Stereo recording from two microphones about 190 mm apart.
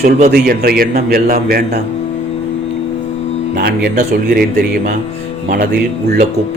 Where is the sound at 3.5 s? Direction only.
55° right (ahead or behind).